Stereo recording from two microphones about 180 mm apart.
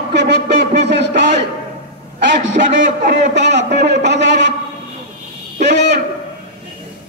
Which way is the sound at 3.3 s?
75° right (ahead or behind).